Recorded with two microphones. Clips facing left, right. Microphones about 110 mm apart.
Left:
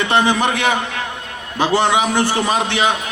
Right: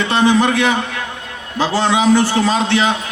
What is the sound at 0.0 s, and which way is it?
A man's voice, 15° left (ahead or behind).